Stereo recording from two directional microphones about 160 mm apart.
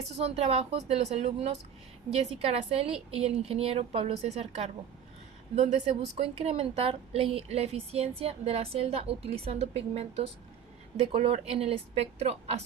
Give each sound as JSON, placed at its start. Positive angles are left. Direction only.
{"t": 0.1, "sound": "a woman's voice", "side_deg": -40}